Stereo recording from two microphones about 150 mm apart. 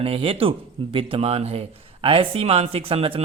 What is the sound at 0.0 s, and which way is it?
A man's voice, 40° right (ahead or behind).